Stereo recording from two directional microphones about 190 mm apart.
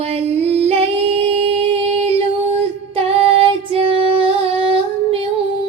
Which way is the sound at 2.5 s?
30° right (ahead or behind).